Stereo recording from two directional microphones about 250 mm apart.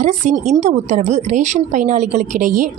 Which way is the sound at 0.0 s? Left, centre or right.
Right.